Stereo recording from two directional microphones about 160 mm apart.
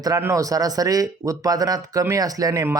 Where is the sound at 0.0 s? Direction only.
20° right (ahead or behind).